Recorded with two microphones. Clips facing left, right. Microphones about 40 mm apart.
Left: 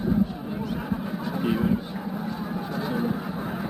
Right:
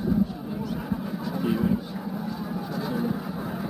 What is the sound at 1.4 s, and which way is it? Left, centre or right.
Honk, left.